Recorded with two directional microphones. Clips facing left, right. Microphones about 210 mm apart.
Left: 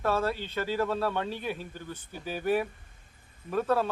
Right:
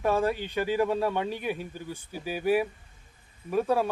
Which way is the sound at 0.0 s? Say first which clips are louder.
Right 3 dB; 15° right (ahead or behind).